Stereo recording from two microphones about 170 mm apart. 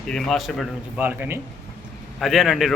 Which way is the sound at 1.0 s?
10° right (ahead or behind).